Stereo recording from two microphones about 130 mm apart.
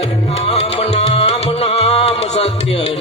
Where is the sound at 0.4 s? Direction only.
55° left (ahead or behind).